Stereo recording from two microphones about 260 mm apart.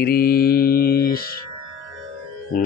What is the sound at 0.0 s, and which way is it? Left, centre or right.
Mantra, left.